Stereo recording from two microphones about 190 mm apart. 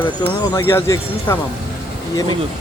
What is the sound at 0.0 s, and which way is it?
Speech, 20° left (ahead or behind).